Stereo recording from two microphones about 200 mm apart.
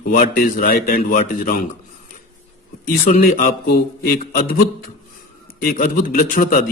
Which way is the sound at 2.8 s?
45° left (ahead or behind).